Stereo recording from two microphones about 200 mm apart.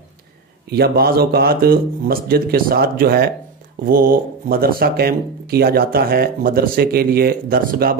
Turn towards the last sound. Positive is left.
turn(degrees=-45)  # may be behind; listen again after turning